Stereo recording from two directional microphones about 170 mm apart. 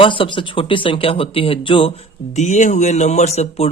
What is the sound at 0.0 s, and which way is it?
Speech, 30° left (ahead or behind).